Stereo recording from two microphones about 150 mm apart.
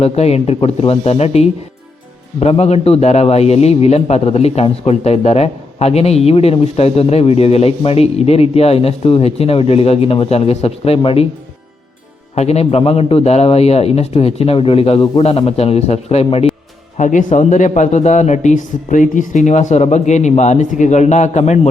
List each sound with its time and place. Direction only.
0.0 s a man's voice: 45° left (ahead or behind)
12.3 s a man's voice: 45° left (ahead or behind)
17.0 s a man's voice: 60° left (ahead or behind)